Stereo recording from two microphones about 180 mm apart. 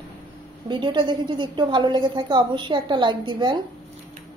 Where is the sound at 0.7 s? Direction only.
25° right (ahead or behind).